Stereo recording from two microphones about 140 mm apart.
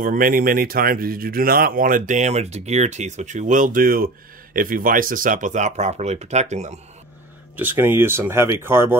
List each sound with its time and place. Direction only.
0.0 s speech: 90° right; by 6.8 s 55° right (ahead or behind)
7.5 s speech: 15° right (ahead or behind)